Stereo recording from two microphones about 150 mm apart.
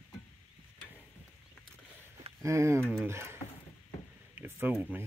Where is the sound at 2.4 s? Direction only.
20° right (ahead or behind).